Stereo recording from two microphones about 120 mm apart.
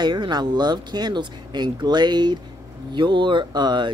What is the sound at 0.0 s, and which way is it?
Speech, 35° right (ahead or behind).